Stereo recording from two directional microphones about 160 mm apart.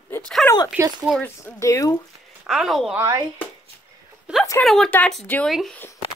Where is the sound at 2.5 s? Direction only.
Centre (ahead or behind).